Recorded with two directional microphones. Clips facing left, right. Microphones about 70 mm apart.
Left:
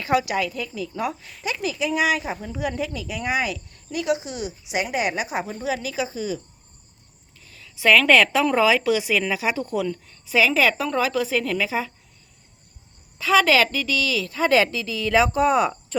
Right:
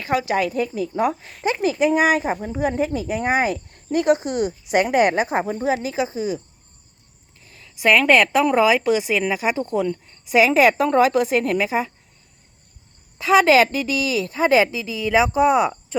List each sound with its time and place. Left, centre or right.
0.0 s speech: right
1.1 s a woman's voice: right
1.5 s speech: right
7.3 s a sound: right
7.8 s a woman's voice: centre
8.8 s a woman's voice: right
9.8 s a woman's voice: centre
13.1 s a woman's voice: right